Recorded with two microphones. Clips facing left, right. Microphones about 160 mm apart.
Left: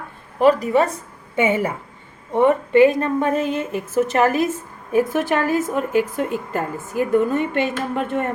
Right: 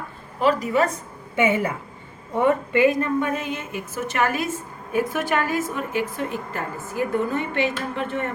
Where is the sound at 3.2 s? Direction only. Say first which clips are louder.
Left 5 dB; 40° left (ahead or behind).